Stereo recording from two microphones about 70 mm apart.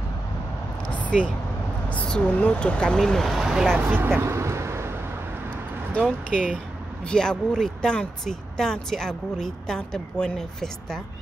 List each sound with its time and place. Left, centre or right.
1.0 s a sound: centre
1.9 s speech: centre
3.7 s vehicle: right
5.9 s speech: centre